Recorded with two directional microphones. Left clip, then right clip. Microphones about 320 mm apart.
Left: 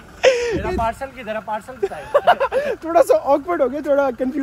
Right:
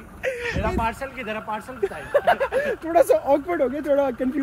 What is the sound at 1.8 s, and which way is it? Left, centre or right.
Speech, centre.